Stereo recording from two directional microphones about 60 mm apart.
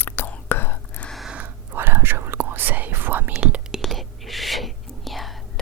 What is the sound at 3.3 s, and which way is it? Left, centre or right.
Whispering, centre.